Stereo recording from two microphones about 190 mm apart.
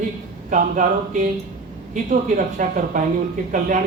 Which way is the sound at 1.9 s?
40° right (ahead or behind).